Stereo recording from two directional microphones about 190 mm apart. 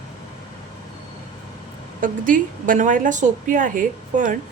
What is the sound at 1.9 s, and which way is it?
A woman's voice, 45° right (ahead or behind).